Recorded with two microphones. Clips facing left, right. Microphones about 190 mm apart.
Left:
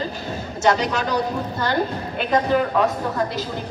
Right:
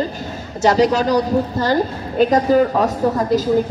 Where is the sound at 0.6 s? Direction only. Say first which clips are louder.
Right 6 dB; 35° right (ahead or behind).